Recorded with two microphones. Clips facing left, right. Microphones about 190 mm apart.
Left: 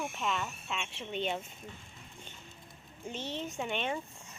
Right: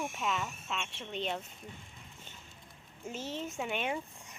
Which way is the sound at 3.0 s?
5° right (ahead or behind).